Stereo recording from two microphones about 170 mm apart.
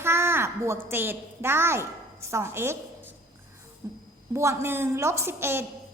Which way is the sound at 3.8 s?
20° right (ahead or behind).